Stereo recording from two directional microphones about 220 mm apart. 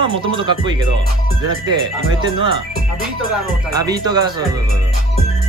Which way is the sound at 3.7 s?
15° right (ahead or behind).